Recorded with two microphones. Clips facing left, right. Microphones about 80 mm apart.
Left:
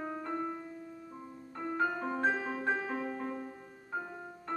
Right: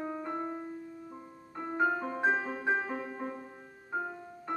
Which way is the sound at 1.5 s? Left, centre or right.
Centre.